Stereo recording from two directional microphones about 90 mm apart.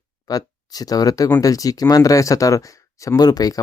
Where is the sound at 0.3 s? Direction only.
45° left (ahead or behind).